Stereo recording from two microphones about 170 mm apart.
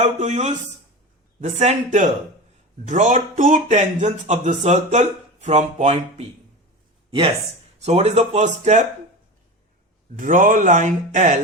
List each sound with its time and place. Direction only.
0.0 s speech: 45° right (ahead or behind)
7.8 s speech: 40° right (ahead or behind)
10.2 s speech: 50° right (ahead or behind)